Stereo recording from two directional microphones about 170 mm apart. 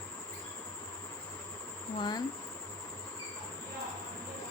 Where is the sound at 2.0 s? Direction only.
25° left (ahead or behind).